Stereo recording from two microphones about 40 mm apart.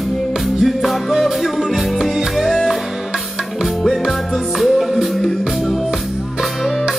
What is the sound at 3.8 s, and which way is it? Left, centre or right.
Music, centre.